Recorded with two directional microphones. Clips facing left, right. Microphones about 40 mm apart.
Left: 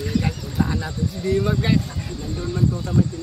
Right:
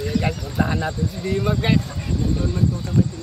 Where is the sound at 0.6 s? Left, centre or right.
Right.